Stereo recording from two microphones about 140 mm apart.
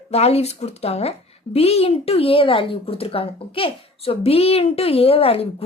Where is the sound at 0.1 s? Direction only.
45° left (ahead or behind).